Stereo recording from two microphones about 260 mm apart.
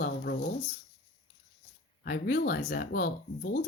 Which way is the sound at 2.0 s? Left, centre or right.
Left.